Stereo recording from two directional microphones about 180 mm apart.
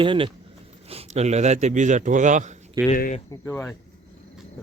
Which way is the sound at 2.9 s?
50° left (ahead or behind).